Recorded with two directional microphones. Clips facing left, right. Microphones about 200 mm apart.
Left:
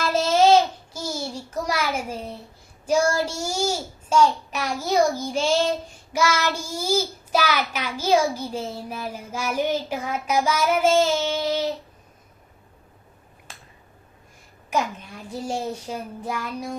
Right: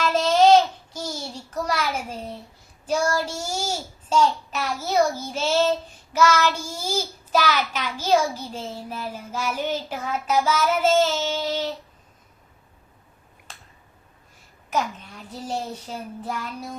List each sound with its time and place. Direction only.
0.1 s babbling: 10° left (ahead or behind)
1.0 s a sound: 10° left (ahead or behind)
2.8 s a child's voice: 10° left (ahead or behind)
14.7 s a child's voice: 10° left (ahead or behind)